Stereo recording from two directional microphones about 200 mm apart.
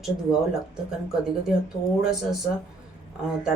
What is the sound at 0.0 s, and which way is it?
Speech, 5° right (ahead or behind).